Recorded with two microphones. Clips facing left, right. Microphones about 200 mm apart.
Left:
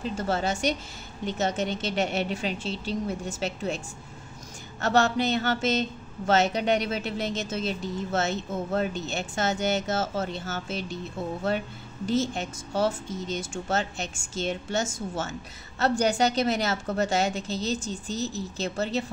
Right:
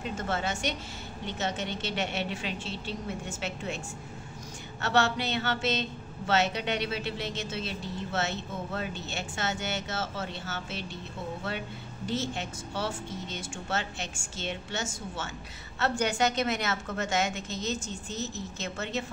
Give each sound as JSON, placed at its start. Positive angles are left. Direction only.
{"t": 0.0, "sound": "a woman's voice", "side_deg": 35}
{"t": 4.8, "sound": "a woman's voice", "side_deg": 40}
{"t": 9.3, "sound": "a woman's voice", "side_deg": 40}
{"t": 12.1, "sound": "a woman's voice", "side_deg": 45}